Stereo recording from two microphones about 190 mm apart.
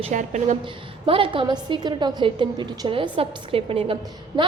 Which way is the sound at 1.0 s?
30° right (ahead or behind).